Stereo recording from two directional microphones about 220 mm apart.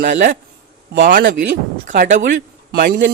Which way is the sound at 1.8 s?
35° right (ahead or behind).